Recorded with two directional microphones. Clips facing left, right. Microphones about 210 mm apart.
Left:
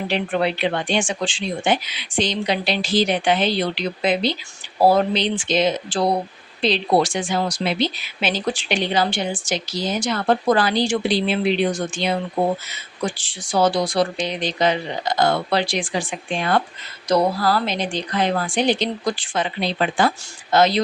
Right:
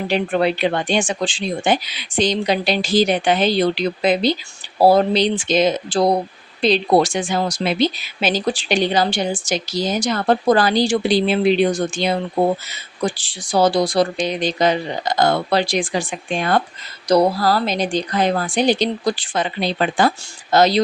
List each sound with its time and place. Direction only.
0.1 s speech: 40° right (ahead or behind)
13.1 s speech: 35° right (ahead or behind)